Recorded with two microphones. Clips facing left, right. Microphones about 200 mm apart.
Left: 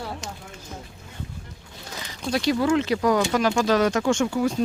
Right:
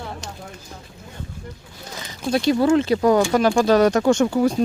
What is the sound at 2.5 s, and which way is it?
Speech, 30° right (ahead or behind).